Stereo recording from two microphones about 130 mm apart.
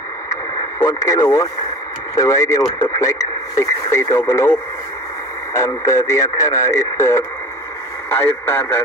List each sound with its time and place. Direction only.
0.8 s speech: 25° left (ahead or behind)
5.5 s speech: 25° left (ahead or behind)